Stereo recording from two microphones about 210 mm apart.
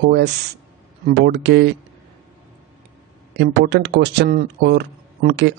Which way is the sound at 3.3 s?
55° right (ahead or behind).